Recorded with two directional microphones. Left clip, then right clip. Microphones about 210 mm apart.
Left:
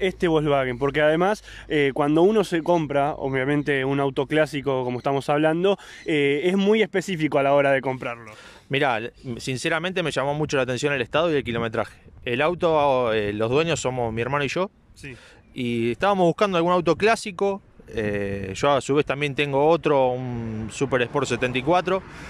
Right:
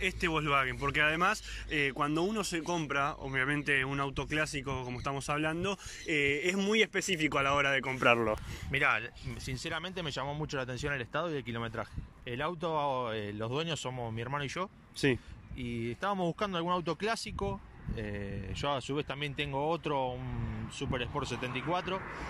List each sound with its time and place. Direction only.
0.0 s speech: 35° left (ahead or behind)
15.0 s a man's voice: 25° right (ahead or behind)
15.5 s speech: 50° left (ahead or behind)